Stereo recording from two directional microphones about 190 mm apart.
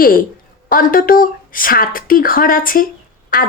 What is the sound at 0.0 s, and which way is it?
A woman's voice, 50° left (ahead or behind).